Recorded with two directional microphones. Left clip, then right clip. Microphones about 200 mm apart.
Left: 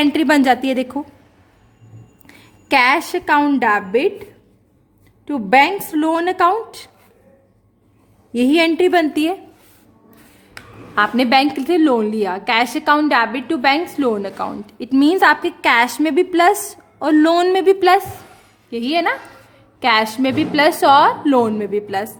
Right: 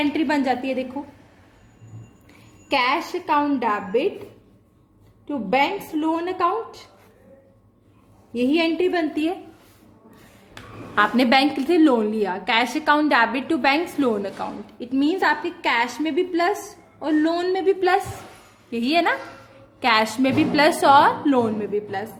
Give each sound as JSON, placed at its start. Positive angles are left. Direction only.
{"t": 0.0, "sound": "a woman's voice", "side_deg": 45}
{"t": 2.2, "sound": "a woman's voice", "side_deg": 50}
{"t": 5.2, "sound": "a woman's voice", "side_deg": 50}
{"t": 8.3, "sound": "a woman's voice", "side_deg": 50}
{"t": 10.9, "sound": "a woman's voice", "side_deg": 20}
{"t": 18.7, "sound": "a woman's voice", "side_deg": 15}